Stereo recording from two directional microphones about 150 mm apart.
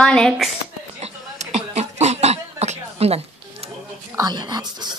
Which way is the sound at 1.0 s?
45° right (ahead or behind).